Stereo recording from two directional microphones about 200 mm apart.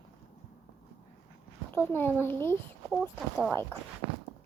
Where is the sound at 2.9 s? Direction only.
Centre (ahead or behind).